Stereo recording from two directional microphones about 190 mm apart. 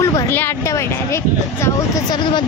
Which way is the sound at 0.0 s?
15° left (ahead or behind).